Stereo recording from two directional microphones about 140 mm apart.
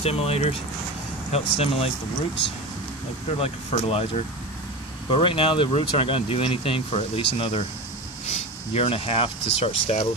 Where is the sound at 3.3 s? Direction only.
45° left (ahead or behind).